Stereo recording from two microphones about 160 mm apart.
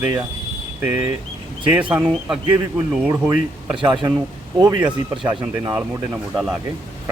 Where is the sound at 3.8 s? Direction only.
30° right (ahead or behind).